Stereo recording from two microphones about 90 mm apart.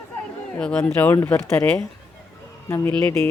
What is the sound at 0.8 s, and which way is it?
Speech, 25° left (ahead or behind).